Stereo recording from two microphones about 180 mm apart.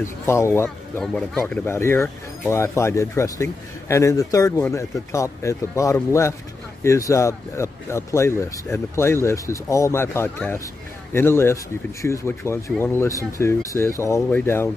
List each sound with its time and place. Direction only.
0.0 s speech: 15° left (ahead or behind)